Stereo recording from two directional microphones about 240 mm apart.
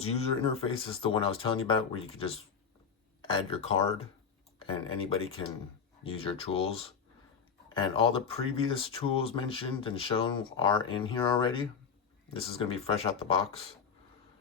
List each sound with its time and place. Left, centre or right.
0.0 s speech: left
6.2 s speech: left